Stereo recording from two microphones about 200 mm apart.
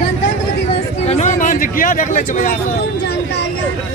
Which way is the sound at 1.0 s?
35° left (ahead or behind).